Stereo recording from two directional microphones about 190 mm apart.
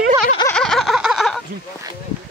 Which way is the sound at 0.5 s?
5° left (ahead or behind).